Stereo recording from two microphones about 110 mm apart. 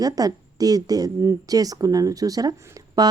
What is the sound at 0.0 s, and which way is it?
Speech, 35° right (ahead or behind).